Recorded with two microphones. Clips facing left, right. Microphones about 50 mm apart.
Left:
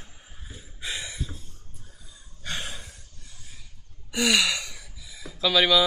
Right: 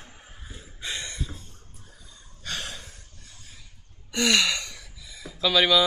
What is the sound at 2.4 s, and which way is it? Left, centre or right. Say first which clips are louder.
Gasp: even; centre.